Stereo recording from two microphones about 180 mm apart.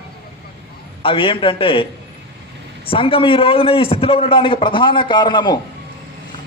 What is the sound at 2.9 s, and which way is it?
A man's voice, 30° left (ahead or behind).